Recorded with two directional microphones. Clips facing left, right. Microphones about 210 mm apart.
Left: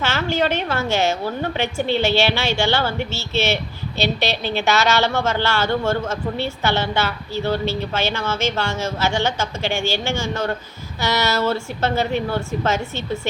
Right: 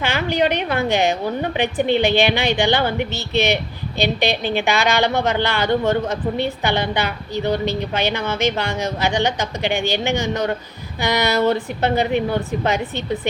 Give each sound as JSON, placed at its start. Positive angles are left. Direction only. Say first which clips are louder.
{"t": 0.0, "sound": "a woman's voice", "louder": "right 2 dB", "side_deg": -15}